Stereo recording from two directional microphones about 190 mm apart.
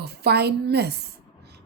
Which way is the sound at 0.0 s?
60° right (ahead or behind).